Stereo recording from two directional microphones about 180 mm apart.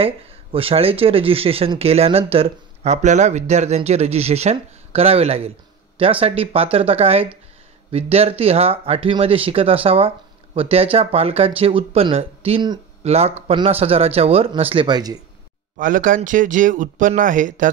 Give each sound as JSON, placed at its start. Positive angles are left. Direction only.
{"t": 0.0, "sound": "speech", "side_deg": -30}
{"t": 15.8, "sound": "speech", "side_deg": -50}